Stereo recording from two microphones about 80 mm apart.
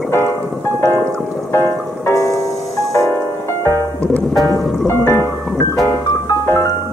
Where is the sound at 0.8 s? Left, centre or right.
Left.